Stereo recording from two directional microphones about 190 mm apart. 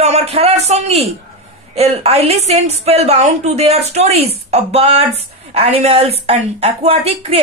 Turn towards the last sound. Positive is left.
turn(degrees=-30)  # may be behind; listen again after turning